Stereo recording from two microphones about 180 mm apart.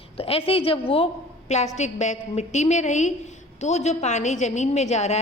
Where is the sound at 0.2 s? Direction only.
30° left (ahead or behind).